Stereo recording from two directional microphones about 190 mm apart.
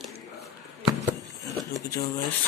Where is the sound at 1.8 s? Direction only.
20° left (ahead or behind).